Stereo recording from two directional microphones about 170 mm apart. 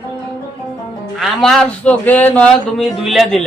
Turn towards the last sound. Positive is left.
turn(degrees=0)  # may be behind; listen again after turning